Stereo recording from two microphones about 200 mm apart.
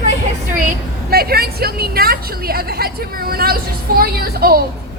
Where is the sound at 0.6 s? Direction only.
45° right (ahead or behind).